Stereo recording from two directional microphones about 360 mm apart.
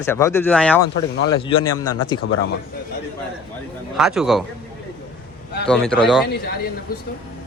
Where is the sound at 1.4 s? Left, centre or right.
Centre.